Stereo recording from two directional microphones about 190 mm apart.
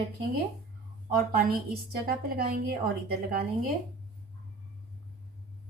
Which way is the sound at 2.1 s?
55° right (ahead or behind).